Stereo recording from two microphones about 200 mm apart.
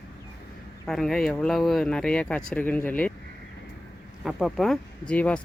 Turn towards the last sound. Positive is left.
turn(degrees=5)  # may be behind; listen again after turning